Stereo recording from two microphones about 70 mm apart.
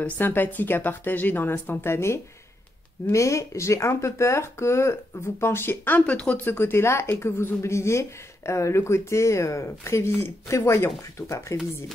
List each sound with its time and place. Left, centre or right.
0.0 s a woman's voice: left
6.4 s speech: left